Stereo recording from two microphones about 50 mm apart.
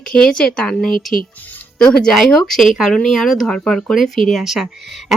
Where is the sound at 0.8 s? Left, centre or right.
Centre.